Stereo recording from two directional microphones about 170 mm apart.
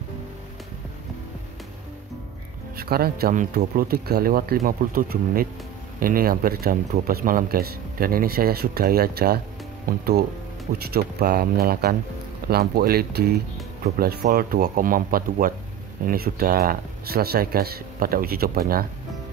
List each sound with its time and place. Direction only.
2.8 s speech: 65° right (ahead or behind)